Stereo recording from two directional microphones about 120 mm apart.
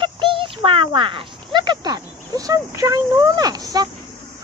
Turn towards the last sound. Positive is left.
turn(degrees=-30)  # may be behind; listen again after turning